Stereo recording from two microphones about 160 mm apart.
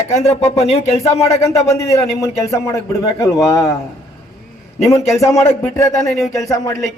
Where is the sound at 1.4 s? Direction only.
20° left (ahead or behind).